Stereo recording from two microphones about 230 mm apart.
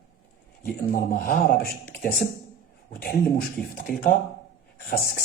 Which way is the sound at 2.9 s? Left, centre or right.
Left.